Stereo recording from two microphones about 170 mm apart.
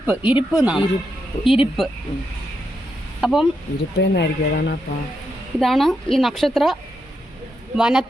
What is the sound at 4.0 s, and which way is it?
Speech, 90° left.